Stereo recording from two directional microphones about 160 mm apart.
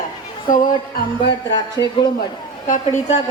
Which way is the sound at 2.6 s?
50° left (ahead or behind).